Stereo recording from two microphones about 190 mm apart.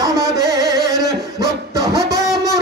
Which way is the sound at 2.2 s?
Centre (ahead or behind).